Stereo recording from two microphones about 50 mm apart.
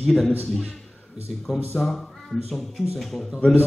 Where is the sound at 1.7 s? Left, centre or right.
Centre.